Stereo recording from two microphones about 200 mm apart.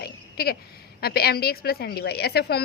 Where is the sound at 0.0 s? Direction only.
50° left (ahead or behind).